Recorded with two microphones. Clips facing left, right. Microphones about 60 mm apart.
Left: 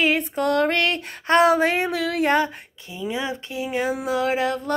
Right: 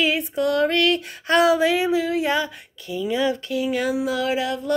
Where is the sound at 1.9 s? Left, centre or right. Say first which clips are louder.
Right 1 dB; left.